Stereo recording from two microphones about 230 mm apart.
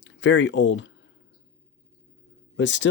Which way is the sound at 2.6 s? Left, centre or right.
Left.